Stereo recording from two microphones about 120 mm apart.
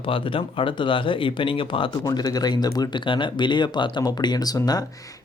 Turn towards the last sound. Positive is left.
turn(degrees=30)  # may be behind; listen again after turning